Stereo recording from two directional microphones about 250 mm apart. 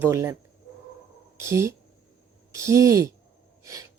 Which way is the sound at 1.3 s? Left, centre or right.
Centre.